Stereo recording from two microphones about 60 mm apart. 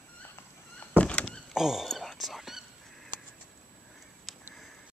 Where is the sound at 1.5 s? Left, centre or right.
Centre.